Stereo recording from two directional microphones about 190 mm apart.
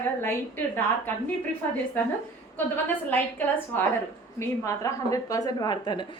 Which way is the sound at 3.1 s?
10° left (ahead or behind).